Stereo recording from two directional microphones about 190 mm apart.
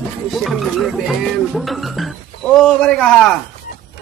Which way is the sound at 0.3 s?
Centre (ahead or behind).